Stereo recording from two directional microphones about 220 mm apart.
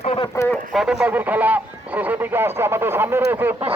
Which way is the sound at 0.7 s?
Centre (ahead or behind).